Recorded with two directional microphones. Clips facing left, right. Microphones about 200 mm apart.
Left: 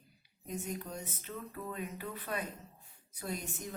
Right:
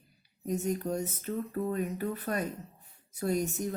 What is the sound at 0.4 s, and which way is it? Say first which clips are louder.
Speech: right 9 dB; 40° right (ahead or behind).